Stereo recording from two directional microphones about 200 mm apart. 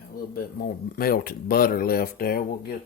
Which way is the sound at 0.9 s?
50° left (ahead or behind).